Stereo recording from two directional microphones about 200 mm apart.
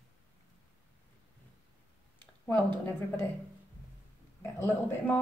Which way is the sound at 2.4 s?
10° left (ahead or behind).